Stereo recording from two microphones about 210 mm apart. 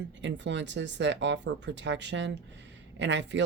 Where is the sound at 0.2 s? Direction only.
60° right (ahead or behind).